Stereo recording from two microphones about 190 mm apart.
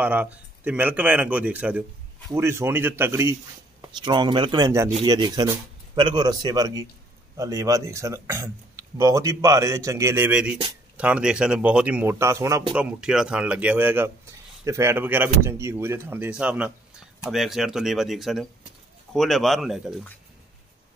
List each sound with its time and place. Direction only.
0.0 s speech: 5° right (ahead or behind)
3.8 s speech: 25° right (ahead or behind)
12.7 s speech: 5° right (ahead or behind)